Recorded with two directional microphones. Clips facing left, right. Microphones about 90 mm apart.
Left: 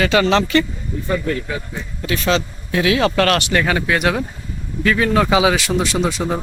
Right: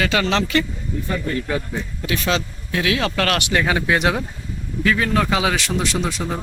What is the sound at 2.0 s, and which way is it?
Speech, 10° right (ahead or behind).